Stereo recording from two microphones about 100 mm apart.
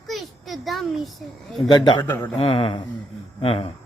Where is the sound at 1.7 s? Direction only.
50° left (ahead or behind).